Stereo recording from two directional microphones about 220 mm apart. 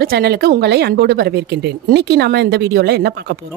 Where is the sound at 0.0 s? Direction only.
45° right (ahead or behind).